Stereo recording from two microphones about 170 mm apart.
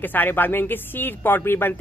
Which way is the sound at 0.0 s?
10° left (ahead or behind).